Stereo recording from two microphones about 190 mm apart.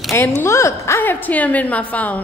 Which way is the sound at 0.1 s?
10° left (ahead or behind).